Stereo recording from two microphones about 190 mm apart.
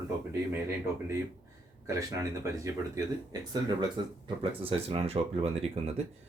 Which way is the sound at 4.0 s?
30° right (ahead or behind).